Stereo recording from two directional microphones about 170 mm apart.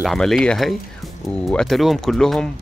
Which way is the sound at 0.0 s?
Centre (ahead or behind).